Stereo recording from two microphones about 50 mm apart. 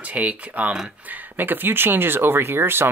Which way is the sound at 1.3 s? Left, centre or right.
Right.